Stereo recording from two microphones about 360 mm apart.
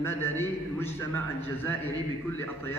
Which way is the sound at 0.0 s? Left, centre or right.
Centre.